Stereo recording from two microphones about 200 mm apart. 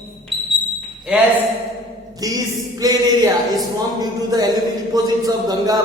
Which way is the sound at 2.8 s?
20° right (ahead or behind).